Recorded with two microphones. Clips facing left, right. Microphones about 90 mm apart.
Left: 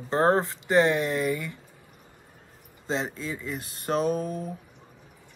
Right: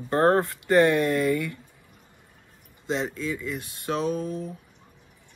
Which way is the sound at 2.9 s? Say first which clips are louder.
Right 2 dB; 30° left (ahead or behind).